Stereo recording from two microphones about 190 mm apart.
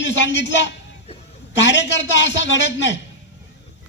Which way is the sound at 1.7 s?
70° left (ahead or behind).